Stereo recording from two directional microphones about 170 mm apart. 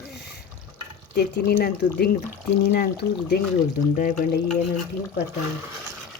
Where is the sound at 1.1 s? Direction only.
70° left (ahead or behind).